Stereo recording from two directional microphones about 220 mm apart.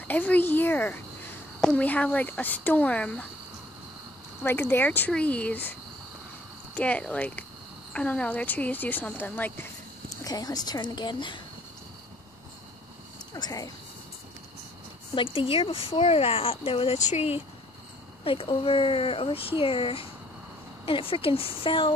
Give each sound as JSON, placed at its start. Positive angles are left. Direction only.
{"t": 0.1, "sound": "speech", "side_deg": 5}
{"t": 4.4, "sound": "speech", "side_deg": 10}
{"t": 13.3, "sound": "speech", "side_deg": 15}
{"t": 15.1, "sound": "speech", "side_deg": 25}